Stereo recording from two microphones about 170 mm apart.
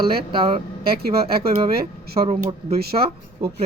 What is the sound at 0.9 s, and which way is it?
Speech, 65° right (ahead or behind).